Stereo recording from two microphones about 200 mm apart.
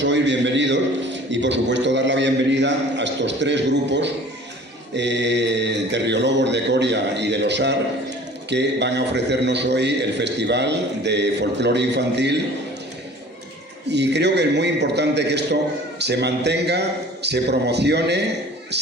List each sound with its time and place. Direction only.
0.0 s a man's voice: 65° right (ahead or behind)
13.8 s a man's voice: 60° right (ahead or behind)